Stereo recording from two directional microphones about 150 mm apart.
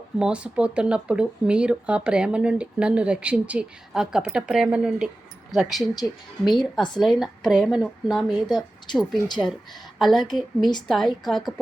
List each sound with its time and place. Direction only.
0.2 s speech: 5° right (ahead or behind)
5.9 s speech: 25° left (ahead or behind)
6.5 s speech: centre (ahead or behind)
10.0 s speech: centre (ahead or behind)